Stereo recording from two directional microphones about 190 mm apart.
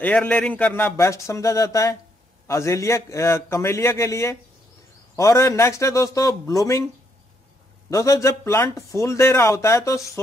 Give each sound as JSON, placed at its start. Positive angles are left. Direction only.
{"t": 0.0, "sound": "a man's voice", "side_deg": 10}
{"t": 7.9, "sound": "a man's voice", "side_deg": 15}